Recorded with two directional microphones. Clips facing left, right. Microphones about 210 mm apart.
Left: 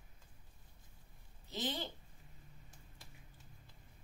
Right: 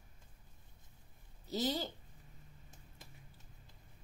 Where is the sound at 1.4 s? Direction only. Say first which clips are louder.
Right 5 dB; 40° right (ahead or behind).